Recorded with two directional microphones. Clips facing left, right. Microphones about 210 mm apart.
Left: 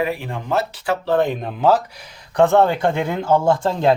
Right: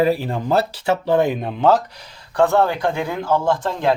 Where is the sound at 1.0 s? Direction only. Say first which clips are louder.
Even; 10° right (ahead or behind).